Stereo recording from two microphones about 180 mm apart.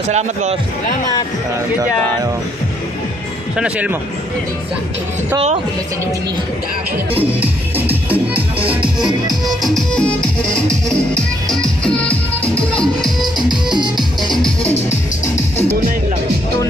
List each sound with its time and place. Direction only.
0.1 s a man's voice: 40° right (ahead or behind)
3.5 s speech: 5° right (ahead or behind)
7.2 s music: 10° right (ahead or behind)
8.8 s music: 25° right (ahead or behind)
9.6 s music: centre (ahead or behind)